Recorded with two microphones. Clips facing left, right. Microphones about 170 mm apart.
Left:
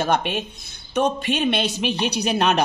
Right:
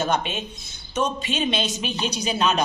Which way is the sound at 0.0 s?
60° left (ahead or behind).